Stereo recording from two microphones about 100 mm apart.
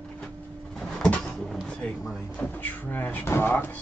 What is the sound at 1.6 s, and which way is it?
Speech, 10° left (ahead or behind).